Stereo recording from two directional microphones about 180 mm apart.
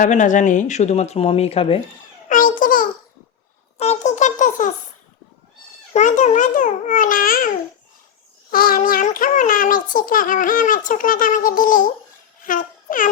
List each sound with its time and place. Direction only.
0.0 s speech: 45° left (ahead or behind)
2.3 s a child's voice: 50° left (ahead or behind)
3.8 s a sound: 40° left (ahead or behind)
5.9 s a child's voice: 40° left (ahead or behind)
12.5 s babbling: 50° left (ahead or behind)